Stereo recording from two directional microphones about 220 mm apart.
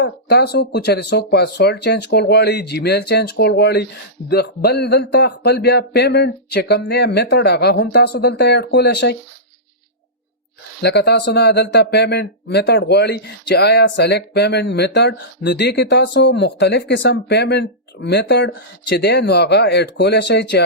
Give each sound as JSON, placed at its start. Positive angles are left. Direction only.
{"t": 0.0, "sound": "speech", "side_deg": 50}
{"t": 10.8, "sound": "speech", "side_deg": 50}